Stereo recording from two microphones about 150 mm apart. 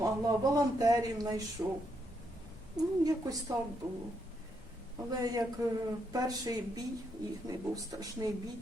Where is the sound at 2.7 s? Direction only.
25° right (ahead or behind).